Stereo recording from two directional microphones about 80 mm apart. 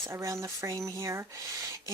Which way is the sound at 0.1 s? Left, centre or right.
Right.